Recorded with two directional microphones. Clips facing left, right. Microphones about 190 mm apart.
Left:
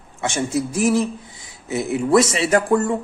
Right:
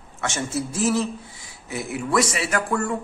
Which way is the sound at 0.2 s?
15° left (ahead or behind).